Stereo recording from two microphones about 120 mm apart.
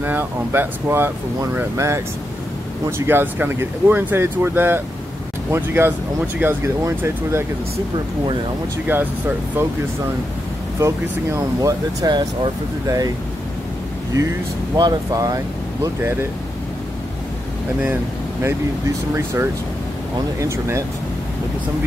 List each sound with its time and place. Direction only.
0.0 s speech: 15° right (ahead or behind)
3.1 s speech: 20° right (ahead or behind)
8.9 s speech: 15° right (ahead or behind)
11.3 s speech: 30° right (ahead or behind)
14.2 s speech: 25° right (ahead or behind)
19.1 s speech: 25° right (ahead or behind)